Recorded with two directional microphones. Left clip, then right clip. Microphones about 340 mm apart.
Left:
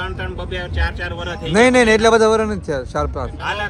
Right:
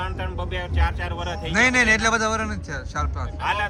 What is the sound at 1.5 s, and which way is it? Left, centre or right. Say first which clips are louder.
Speech: left 6 dB; centre.